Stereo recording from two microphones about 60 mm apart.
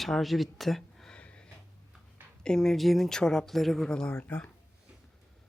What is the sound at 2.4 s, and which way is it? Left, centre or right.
Speech, centre.